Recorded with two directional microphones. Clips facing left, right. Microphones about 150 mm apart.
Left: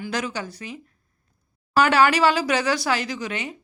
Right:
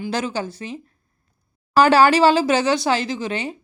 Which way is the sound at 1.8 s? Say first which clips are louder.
Right 4 dB; 30° right (ahead or behind).